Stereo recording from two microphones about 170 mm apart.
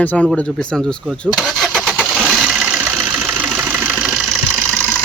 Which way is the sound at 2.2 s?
5° right (ahead or behind).